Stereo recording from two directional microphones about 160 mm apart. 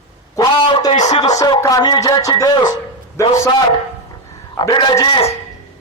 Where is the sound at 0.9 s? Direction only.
45° left (ahead or behind).